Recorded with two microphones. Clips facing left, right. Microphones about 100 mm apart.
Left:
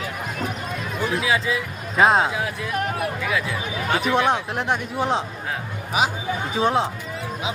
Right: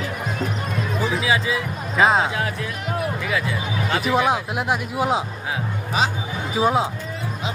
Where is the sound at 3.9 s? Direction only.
Centre (ahead or behind).